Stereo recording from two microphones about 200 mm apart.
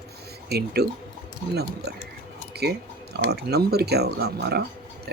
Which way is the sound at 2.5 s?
55° right (ahead or behind).